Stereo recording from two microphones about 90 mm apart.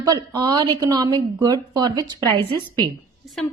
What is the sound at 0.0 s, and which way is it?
A woman's voice, 50° right (ahead or behind).